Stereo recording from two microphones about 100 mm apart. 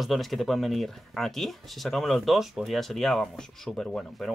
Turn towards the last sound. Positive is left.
turn(degrees=10)  # may be behind; listen again after turning